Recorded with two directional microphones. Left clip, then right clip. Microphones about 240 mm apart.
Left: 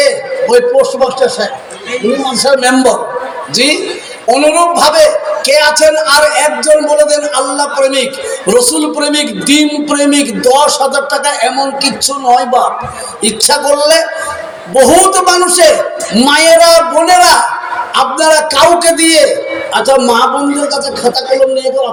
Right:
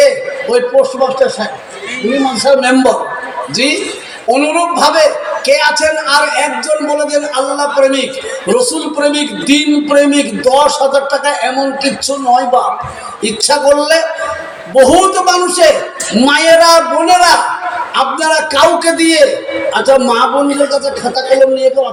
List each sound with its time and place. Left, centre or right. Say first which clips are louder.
0.4 s speech: left 3 dB; left
2.6 s speech: left 1 dB; left